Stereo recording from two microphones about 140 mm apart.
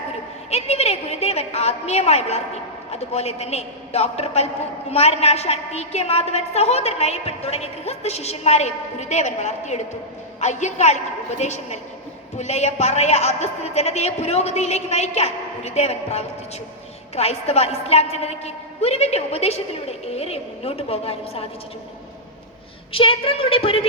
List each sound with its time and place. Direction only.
0.5 s a woman's voice: 50° left (ahead or behind)
22.9 s a woman's voice: 40° left (ahead or behind)